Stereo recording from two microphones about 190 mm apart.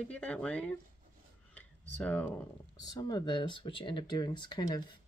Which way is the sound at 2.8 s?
20° left (ahead or behind).